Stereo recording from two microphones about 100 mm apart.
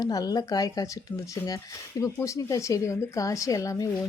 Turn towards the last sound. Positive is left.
turn(degrees=35)  # may be behind; listen again after turning